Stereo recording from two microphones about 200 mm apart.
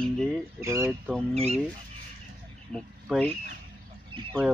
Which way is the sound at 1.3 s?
30° right (ahead or behind).